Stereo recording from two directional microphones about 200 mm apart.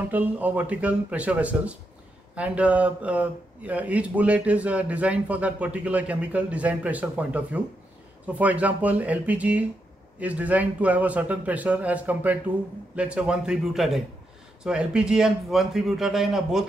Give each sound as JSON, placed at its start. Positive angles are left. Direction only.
{"t": 0.1, "sound": "a man's voice", "side_deg": -10}